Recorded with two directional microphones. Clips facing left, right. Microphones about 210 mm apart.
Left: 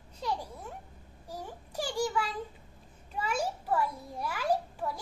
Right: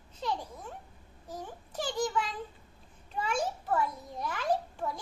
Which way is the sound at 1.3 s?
10° left (ahead or behind).